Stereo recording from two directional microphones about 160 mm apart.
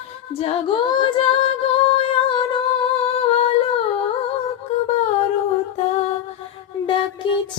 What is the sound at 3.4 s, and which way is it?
Female singing, 35° left (ahead or behind).